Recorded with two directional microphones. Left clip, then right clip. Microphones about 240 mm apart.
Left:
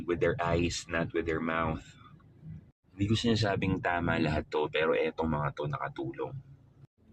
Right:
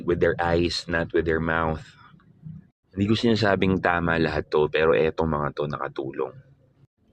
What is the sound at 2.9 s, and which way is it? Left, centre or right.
Speech, right.